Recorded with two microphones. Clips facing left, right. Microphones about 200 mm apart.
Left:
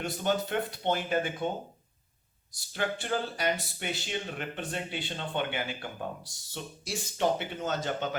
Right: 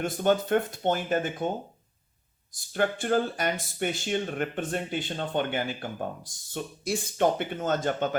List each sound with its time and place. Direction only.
0.0 s speech: 50° right (ahead or behind)
2.6 s speech: 50° right (ahead or behind)